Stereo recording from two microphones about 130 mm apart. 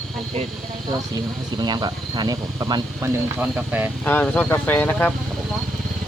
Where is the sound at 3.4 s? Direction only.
10° right (ahead or behind).